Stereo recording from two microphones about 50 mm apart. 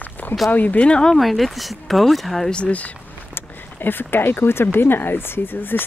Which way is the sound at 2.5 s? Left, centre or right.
Left.